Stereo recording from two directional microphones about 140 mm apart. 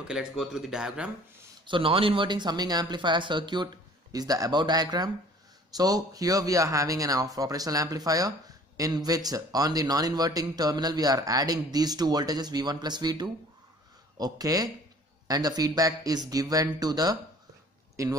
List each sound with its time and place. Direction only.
0.1 s speech: 5° right (ahead or behind)
1.7 s speech: 40° right (ahead or behind); by 18.1 s 20° right (ahead or behind)